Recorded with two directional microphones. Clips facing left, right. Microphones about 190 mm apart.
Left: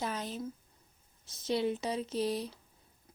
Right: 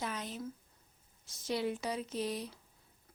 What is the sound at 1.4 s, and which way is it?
Speech, 25° left (ahead or behind).